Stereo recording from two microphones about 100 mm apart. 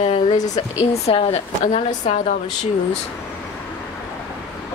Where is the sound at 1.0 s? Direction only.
85° left.